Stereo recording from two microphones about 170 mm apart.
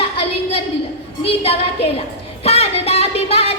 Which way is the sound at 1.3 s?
35° left (ahead or behind).